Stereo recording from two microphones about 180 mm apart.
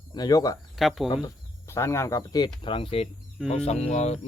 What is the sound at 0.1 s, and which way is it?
Speech, 20° left (ahead or behind).